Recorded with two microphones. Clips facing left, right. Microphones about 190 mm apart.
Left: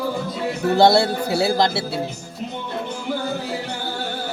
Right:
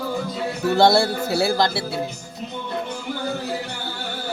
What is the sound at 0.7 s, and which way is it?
Speech, 20° left (ahead or behind).